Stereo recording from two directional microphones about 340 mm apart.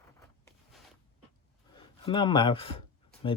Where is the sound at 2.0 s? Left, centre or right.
Centre.